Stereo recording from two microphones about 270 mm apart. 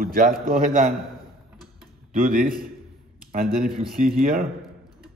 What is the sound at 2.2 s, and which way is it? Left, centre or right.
Speech, right.